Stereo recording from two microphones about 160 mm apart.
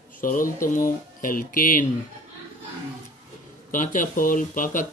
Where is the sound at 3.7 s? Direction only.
55° left (ahead or behind).